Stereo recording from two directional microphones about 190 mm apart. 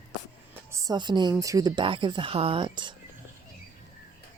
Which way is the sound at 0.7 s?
20° right (ahead or behind).